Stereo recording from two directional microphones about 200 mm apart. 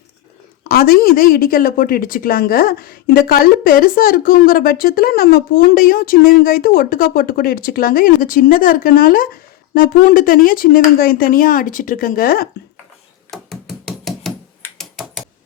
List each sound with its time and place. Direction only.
0.7 s a woman's voice: 50° left (ahead or behind)
13.3 s music: centre (ahead or behind)
14.8 s typing: centre (ahead or behind)